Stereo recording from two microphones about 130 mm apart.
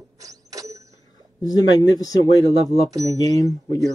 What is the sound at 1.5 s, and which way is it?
Speech, 30° left (ahead or behind).